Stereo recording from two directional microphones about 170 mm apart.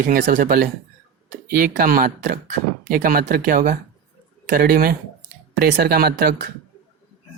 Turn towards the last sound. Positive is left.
turn(degrees=-70)  # may be behind; listen again after turning